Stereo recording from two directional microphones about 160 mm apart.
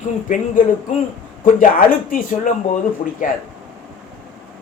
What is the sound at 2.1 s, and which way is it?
Speech, 60° left (ahead or behind).